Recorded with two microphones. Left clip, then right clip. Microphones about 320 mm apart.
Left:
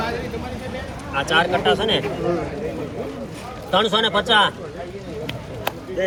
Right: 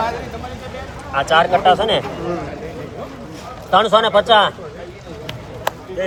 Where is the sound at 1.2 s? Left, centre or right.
Right.